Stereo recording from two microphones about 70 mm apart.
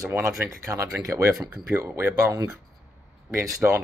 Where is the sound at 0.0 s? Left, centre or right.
Right.